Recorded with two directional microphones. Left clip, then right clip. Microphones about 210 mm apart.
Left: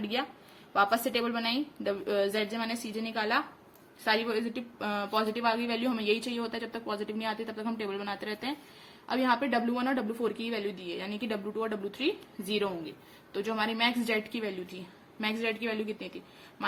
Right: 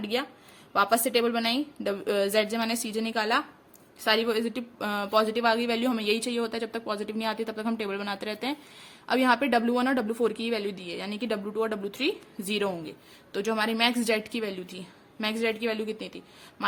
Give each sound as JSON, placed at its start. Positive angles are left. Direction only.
{"t": 0.0, "sound": "a woman's voice", "side_deg": -20}